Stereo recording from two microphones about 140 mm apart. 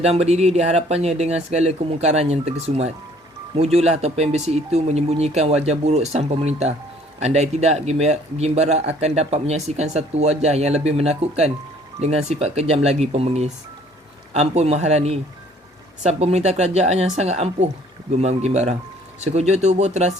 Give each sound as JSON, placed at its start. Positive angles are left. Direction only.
{"t": 0.0, "sound": "speech", "side_deg": -50}